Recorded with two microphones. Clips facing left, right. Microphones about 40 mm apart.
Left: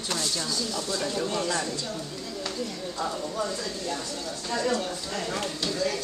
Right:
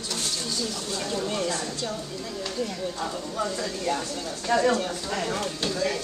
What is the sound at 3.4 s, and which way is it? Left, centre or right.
Speech, centre.